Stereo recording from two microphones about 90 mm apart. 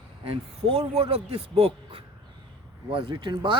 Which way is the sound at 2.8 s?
75° right (ahead or behind).